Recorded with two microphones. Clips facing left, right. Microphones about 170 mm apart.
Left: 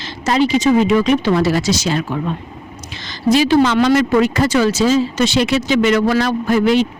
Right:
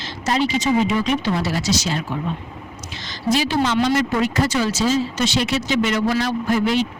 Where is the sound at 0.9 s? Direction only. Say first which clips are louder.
Left 6 dB; 90° left.